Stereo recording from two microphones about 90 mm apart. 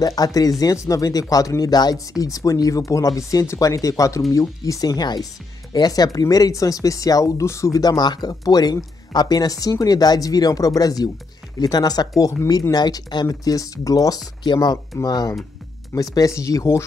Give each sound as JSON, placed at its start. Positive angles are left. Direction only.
{"t": 0.0, "sound": "speech", "side_deg": 45}
{"t": 15.0, "sound": "speech", "side_deg": 45}